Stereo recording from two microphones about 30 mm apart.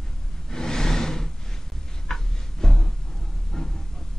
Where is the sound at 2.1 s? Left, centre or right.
Centre.